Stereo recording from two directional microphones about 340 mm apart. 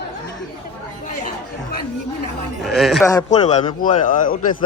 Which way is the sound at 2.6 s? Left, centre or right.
Centre.